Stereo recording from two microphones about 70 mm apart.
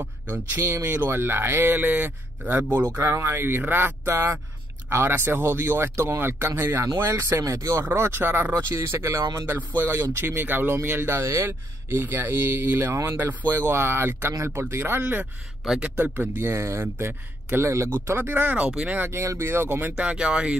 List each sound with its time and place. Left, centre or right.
0.6 s speech: right
16.3 s speech: right; by 19.0 s centre
19.0 s speech: right
20.0 s speech: centre